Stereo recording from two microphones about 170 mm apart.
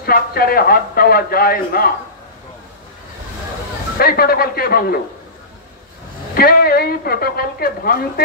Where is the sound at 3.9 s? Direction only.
65° left (ahead or behind).